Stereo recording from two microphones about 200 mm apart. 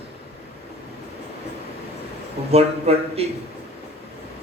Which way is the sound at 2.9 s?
30° right (ahead or behind).